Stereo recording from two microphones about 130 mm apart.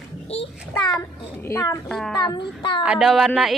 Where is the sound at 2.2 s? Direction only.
35° left (ahead or behind).